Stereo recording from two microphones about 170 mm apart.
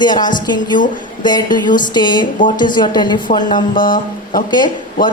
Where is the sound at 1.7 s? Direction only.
50° left (ahead or behind).